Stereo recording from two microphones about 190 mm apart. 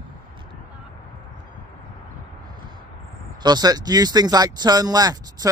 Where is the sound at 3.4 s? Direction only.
20° right (ahead or behind).